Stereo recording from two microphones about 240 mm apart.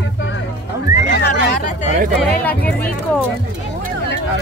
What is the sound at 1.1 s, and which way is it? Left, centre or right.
Speech, left.